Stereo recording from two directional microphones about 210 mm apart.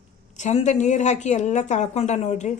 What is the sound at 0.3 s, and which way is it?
A woman's voice, 35° left (ahead or behind).